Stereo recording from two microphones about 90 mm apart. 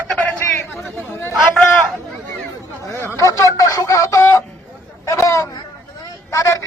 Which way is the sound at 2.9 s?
30° left (ahead or behind).